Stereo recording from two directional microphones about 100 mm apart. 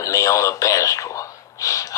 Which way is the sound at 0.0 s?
35° left (ahead or behind).